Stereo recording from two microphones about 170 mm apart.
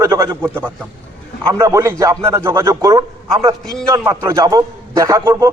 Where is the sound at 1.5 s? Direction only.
15° right (ahead or behind).